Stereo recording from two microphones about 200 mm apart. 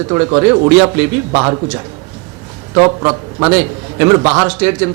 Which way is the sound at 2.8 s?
25° right (ahead or behind).